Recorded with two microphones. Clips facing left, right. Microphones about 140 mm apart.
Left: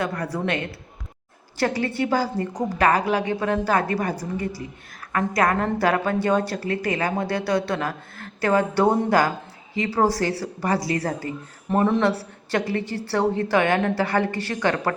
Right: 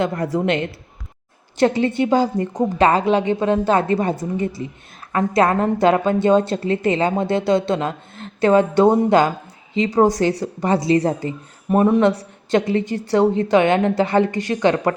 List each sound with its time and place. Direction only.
0.0 s a woman's voice: 25° right (ahead or behind)